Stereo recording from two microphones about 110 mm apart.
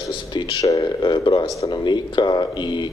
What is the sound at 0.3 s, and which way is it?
Speech, 35° left (ahead or behind).